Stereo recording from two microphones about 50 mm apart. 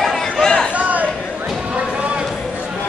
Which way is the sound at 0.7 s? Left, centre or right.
Right.